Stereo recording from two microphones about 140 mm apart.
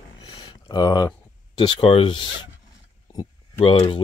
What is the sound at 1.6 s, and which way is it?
Speech, 40° left (ahead or behind).